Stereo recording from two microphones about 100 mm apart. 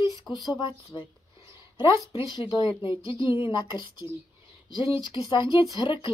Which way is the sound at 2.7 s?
60° left (ahead or behind).